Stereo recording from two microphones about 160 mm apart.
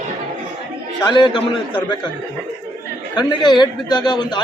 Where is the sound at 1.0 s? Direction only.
30° left (ahead or behind).